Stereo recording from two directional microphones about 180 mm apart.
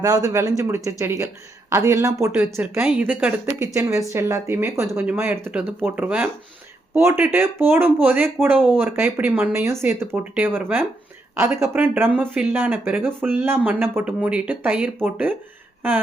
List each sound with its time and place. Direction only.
0.0 s speech: 20° right (ahead or behind)